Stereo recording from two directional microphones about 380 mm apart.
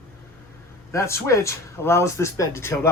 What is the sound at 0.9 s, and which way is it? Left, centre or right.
Speech, centre.